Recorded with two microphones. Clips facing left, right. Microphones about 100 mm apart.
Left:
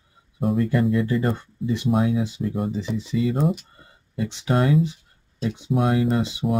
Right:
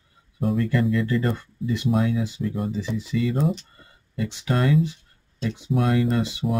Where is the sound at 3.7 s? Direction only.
20° left (ahead or behind).